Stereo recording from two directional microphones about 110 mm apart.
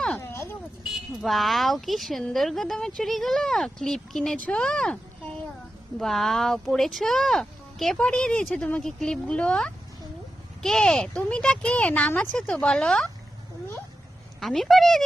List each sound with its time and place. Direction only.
0.2 s a sound: 25° left (ahead or behind)
1.2 s speech: centre (ahead or behind)
6.0 s a woman's voice: centre (ahead or behind); by 12.4 s 20° left (ahead or behind)
12.4 s speech: 5° left (ahead or behind)
14.4 s speech: centre (ahead or behind)